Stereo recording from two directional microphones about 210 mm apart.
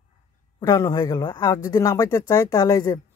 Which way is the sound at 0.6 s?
20° left (ahead or behind).